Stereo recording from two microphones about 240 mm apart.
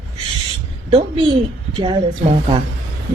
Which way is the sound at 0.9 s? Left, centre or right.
Right.